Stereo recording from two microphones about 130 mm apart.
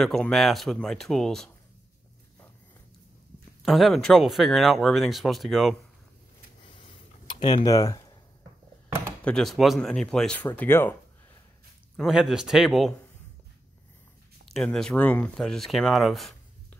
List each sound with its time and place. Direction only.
0.0 s speech: 5° left (ahead or behind)
3.6 s speech: centre (ahead or behind)
6.8 s a sound: 40° left (ahead or behind)
9.2 s speech: 5° left (ahead or behind)
12.0 s speech: 5° right (ahead or behind)
14.5 s speech: 5° left (ahead or behind)